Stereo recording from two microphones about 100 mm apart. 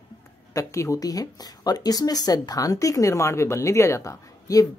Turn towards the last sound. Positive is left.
turn(degrees=35)  # may be behind; listen again after turning